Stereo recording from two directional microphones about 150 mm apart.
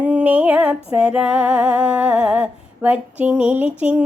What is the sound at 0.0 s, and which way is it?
Female singing, 10° right (ahead or behind).